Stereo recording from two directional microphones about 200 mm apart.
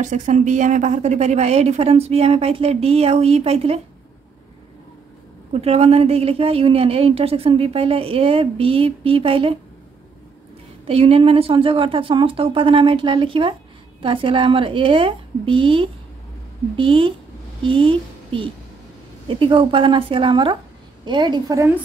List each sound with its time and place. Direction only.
0.0 s a woman's voice: 35° right (ahead or behind)
5.5 s a woman's voice: 30° right (ahead or behind)
10.9 s a woman's voice: 30° right (ahead or behind)